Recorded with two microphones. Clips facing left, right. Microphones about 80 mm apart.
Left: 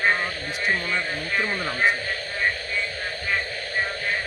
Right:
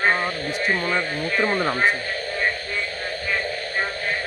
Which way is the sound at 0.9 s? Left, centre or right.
Right.